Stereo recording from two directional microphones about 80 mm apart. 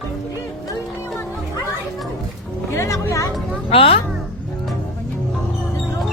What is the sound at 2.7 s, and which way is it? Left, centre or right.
Music, left.